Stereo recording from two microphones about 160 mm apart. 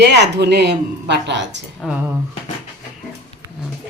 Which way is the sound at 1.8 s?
Centre (ahead or behind).